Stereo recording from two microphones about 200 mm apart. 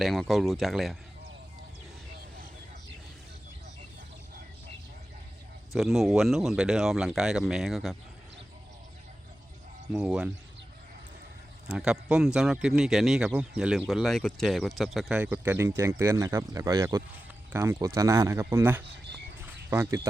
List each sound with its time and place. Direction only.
0.0 s speech: centre (ahead or behind)
5.7 s speech: centre (ahead or behind)
9.9 s speech: 5° right (ahead or behind)
11.7 s speech: 5° right (ahead or behind)